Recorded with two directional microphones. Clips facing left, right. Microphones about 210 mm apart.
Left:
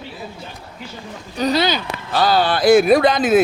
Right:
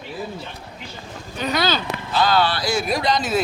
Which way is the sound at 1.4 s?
35° left (ahead or behind).